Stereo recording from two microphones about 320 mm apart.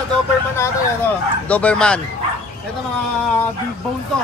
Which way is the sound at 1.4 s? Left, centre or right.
Centre.